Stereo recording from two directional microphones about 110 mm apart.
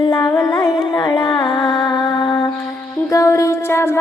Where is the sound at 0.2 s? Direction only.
25° left (ahead or behind).